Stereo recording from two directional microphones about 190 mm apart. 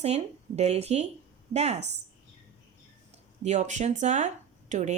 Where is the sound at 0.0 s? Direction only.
35° right (ahead or behind).